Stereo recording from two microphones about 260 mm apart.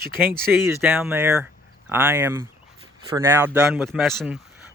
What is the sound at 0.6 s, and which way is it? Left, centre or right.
Speech, centre.